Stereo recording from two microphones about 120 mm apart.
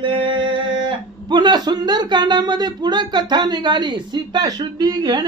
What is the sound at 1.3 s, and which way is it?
A man's voice, 35° right (ahead or behind).